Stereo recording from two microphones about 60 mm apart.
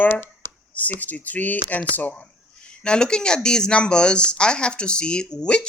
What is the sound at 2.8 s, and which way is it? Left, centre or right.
Speech, centre.